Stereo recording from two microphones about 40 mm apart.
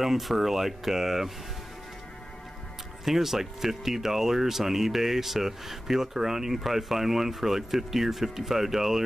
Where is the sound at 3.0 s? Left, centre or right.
Centre.